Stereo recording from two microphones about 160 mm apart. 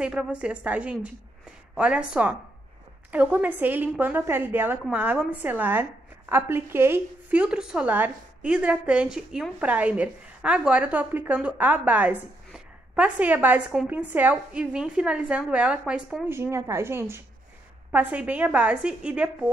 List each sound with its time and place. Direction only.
0.0 s a woman's voice: 5° right (ahead or behind)
16.3 s a woman's voice: 15° right (ahead or behind)